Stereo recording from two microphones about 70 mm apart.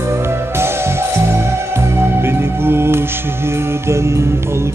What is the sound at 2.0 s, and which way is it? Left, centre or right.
Music, right.